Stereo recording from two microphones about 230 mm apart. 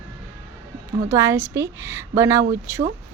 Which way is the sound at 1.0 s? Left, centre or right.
Centre.